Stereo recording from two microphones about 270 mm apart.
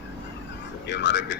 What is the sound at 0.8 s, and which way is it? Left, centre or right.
Speech, left.